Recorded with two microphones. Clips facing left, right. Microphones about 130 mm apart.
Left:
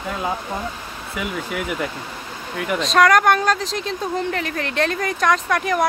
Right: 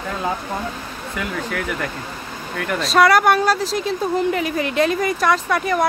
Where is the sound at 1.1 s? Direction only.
10° left (ahead or behind).